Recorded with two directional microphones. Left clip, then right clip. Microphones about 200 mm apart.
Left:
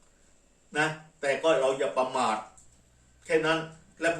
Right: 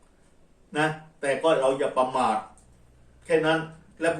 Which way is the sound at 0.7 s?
5° left (ahead or behind).